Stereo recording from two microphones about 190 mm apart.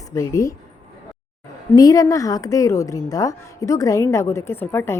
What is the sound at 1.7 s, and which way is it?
A woman's voice, 20° left (ahead or behind).